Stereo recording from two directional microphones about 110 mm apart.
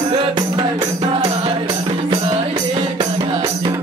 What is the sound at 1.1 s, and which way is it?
Music, 60° right (ahead or behind).